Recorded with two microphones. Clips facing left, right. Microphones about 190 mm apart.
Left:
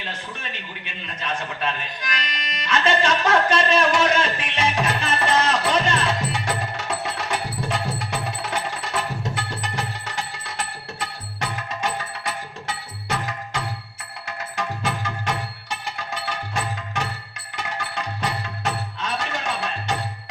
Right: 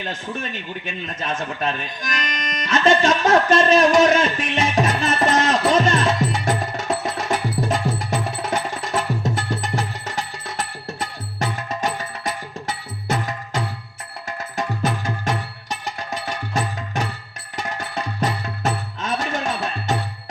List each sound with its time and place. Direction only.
0.3 s speech: 45° right (ahead or behind)
4.7 s music: 40° right (ahead or behind)
11.8 s music: 40° right (ahead or behind)